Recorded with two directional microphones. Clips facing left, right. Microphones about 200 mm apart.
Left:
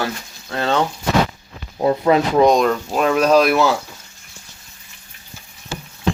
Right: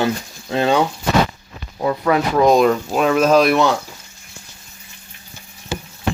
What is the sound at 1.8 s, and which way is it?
Speech, 25° left (ahead or behind).